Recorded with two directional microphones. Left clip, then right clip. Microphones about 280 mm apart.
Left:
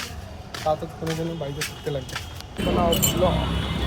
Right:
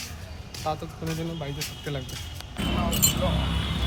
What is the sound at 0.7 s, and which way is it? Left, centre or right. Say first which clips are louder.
Speech: left 6 dB; centre.